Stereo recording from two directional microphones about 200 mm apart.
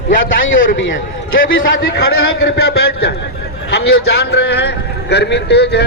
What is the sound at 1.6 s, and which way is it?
A man's voice, 50° left (ahead or behind).